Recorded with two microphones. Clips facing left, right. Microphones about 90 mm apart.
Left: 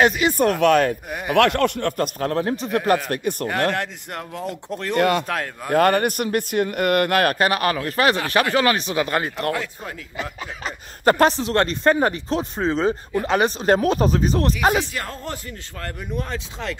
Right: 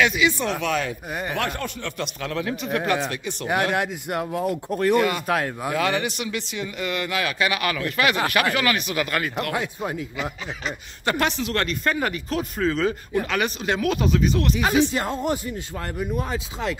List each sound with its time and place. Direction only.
0.0 s speech: 45° left (ahead or behind)
3.1 s speech: 50° left (ahead or behind)
3.7 s speech: 10° right (ahead or behind)
4.9 s speech: 60° left (ahead or behind); by 9.5 s 30° left (ahead or behind)
9.5 s speech: 20° right (ahead or behind)
11.1 s speech: 40° left (ahead or behind)
15.0 s speech: 20° right (ahead or behind)
16.0 s speech: 5° right (ahead or behind)